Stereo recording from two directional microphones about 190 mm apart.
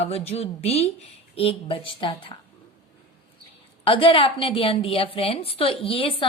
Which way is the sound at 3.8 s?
30° left (ahead or behind).